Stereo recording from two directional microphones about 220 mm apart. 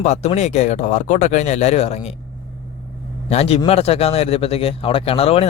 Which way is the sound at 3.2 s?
30° left (ahead or behind).